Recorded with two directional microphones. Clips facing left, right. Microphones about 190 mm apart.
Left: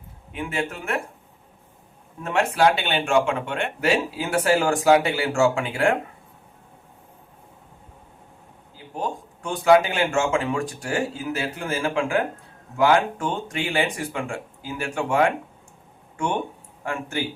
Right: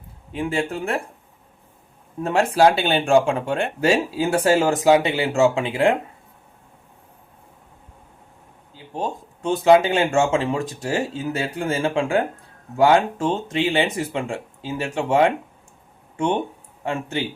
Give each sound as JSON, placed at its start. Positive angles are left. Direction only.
{"t": 0.3, "sound": "speech", "side_deg": -30}
{"t": 2.2, "sound": "speech", "side_deg": -35}
{"t": 8.7, "sound": "speech", "side_deg": -25}